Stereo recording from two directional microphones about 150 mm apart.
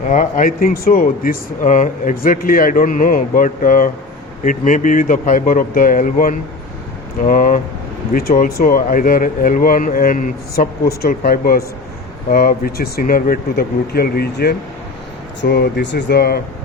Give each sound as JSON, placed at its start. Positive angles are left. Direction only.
{"t": 0.1, "sound": "speech", "side_deg": 55}
{"t": 8.1, "sound": "speech", "side_deg": 75}